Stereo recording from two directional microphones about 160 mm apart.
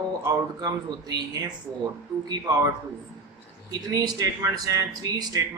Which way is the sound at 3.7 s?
25° right (ahead or behind).